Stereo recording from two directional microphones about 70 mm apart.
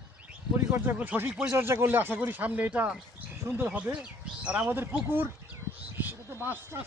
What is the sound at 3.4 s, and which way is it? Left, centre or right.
Speech, right.